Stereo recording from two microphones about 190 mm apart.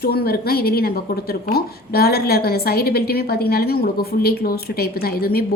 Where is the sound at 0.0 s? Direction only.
55° left (ahead or behind).